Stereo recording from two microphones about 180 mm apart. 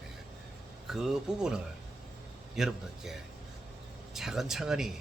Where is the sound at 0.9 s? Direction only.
Centre (ahead or behind).